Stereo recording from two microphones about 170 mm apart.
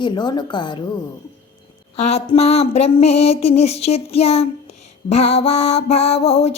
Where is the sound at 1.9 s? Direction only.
40° left (ahead or behind).